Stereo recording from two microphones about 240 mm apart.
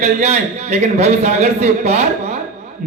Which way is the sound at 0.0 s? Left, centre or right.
Right.